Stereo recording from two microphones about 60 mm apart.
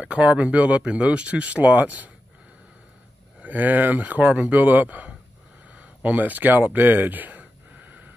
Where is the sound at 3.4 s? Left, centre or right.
Right.